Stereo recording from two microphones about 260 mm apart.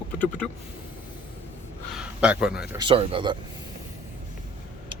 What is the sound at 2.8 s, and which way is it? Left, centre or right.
Speech, right.